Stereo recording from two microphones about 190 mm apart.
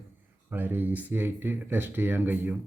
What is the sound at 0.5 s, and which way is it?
Speech, 10° right (ahead or behind).